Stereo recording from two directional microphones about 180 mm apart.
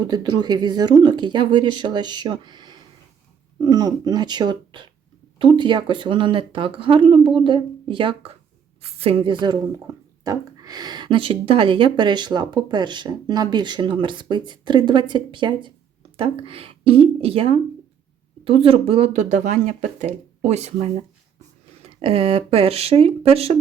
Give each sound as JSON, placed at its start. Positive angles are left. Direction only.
{"t": 0.0, "sound": "speech", "side_deg": -25}